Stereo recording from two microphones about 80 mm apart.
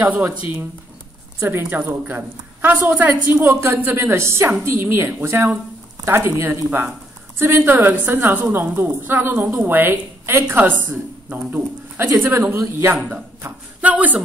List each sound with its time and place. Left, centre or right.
0.3 s a woman's voice: right